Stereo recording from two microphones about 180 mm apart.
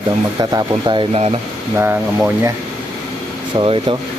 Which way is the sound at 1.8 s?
10° right (ahead or behind).